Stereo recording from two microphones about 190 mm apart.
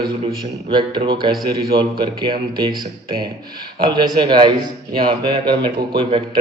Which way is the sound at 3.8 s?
20° right (ahead or behind).